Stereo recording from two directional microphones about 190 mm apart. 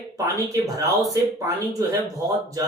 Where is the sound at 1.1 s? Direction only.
20° right (ahead or behind).